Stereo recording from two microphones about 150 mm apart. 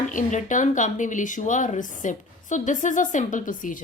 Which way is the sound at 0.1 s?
55° left (ahead or behind).